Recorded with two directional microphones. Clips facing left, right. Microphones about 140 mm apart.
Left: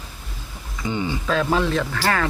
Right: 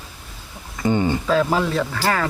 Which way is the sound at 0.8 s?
50° right (ahead or behind).